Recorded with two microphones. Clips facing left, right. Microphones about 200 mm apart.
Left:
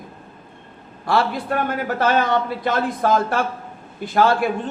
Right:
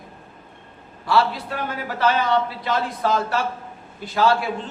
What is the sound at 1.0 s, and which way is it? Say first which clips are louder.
A man's voice: left 1 dB; 50° left (ahead or behind).